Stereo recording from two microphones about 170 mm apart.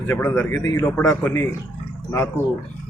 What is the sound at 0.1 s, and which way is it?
Speech, 10° left (ahead or behind).